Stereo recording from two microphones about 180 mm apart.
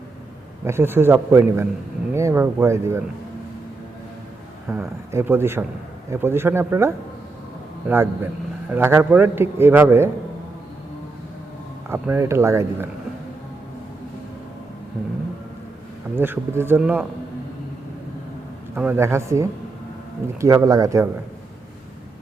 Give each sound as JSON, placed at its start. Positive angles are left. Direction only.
{"t": 0.6, "sound": "a man's voice", "side_deg": -15}
{"t": 4.7, "sound": "a man's voice", "side_deg": -15}
{"t": 11.9, "sound": "a man's voice", "side_deg": -15}
{"t": 16.1, "sound": "a man's voice", "side_deg": -10}
{"t": 18.7, "sound": "a man's voice", "side_deg": -10}